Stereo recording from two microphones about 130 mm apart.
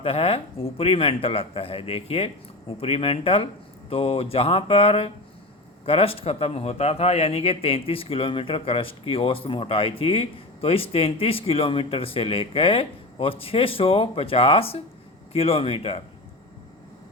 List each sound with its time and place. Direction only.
0.0 s a man's voice: 45° left (ahead or behind)